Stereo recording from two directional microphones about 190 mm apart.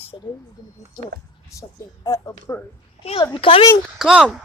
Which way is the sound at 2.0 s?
15° left (ahead or behind).